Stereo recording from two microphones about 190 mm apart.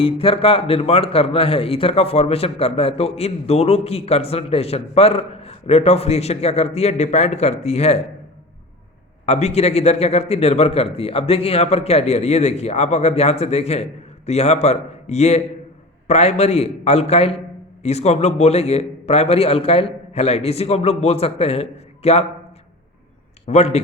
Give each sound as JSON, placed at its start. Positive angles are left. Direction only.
{"t": 0.0, "sound": "a man's voice", "side_deg": 30}
{"t": 9.2, "sound": "a man's voice", "side_deg": 35}
{"t": 23.5, "sound": "a man's voice", "side_deg": 35}